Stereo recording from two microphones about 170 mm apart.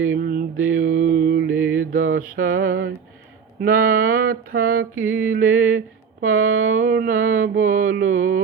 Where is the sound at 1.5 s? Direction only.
10° right (ahead or behind).